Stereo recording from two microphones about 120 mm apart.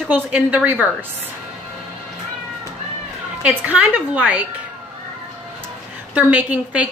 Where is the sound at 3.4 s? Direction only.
10° right (ahead or behind).